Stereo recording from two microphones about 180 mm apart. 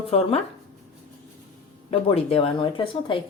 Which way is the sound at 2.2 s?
30° left (ahead or behind).